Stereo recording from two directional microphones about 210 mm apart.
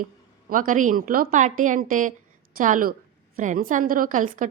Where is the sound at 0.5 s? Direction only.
40° right (ahead or behind).